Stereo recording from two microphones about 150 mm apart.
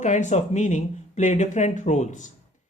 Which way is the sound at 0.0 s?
55° left (ahead or behind).